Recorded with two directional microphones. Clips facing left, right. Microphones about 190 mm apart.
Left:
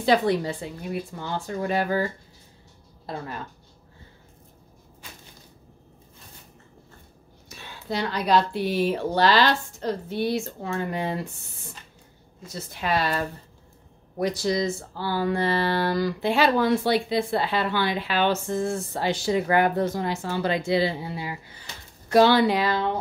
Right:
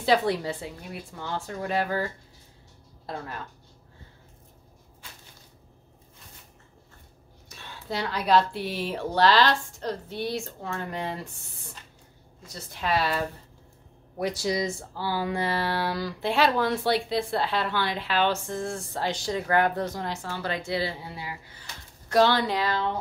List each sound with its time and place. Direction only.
0.0 s speech: centre (ahead or behind)
7.4 s speech: centre (ahead or behind)
12.4 s speech: 5° left (ahead or behind)
14.2 s speech: 10° right (ahead or behind)
20.2 s speech: 15° left (ahead or behind)
22.1 s speech: 5° left (ahead or behind)